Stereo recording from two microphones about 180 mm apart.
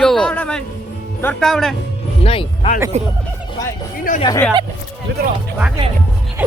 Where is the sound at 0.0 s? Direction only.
5° left (ahead or behind).